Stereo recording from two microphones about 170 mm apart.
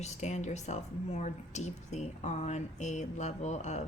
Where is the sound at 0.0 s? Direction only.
40° left (ahead or behind).